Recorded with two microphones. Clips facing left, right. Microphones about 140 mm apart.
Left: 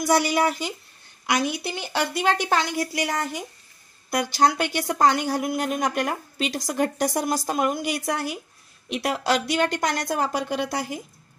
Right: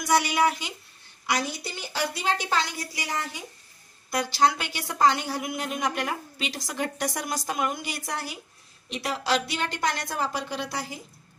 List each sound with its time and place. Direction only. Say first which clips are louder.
0.0 s speech: left 2 dB; 40° left (ahead or behind)
1.2 s a woman's voice: left 4 dB; 60° left (ahead or behind); by 7.8 s 40° left (ahead or behind)
7.8 s a woman's voice: left 7 dB; 55° left (ahead or behind)